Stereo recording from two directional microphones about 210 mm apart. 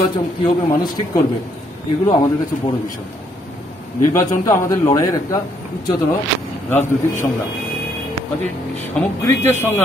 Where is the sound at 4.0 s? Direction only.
15° left (ahead or behind).